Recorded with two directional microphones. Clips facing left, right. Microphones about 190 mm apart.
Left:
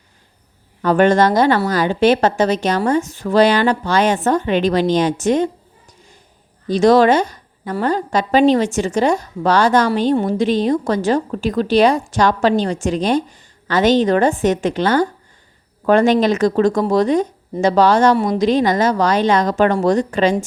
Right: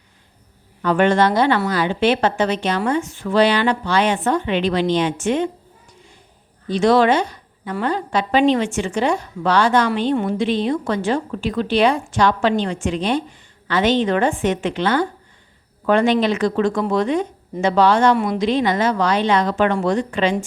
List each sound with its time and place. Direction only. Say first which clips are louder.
0.8 s a woman's voice: left 3 dB; 40° left (ahead or behind)
6.7 s a woman's voice: left 3 dB; 40° left (ahead or behind)